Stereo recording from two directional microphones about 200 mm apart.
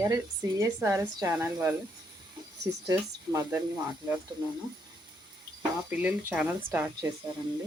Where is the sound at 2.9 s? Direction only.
15° right (ahead or behind).